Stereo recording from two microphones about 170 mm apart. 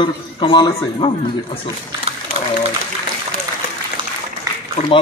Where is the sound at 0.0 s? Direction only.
30° left (ahead or behind).